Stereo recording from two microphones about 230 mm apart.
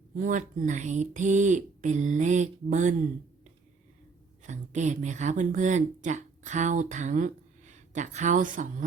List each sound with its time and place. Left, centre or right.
0.2 s speech: right
4.4 s speech: right